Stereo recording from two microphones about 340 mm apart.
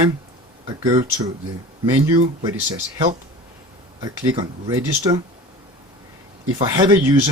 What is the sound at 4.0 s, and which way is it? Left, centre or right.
Speech, centre.